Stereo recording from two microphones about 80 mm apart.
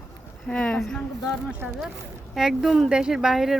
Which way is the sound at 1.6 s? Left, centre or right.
Centre.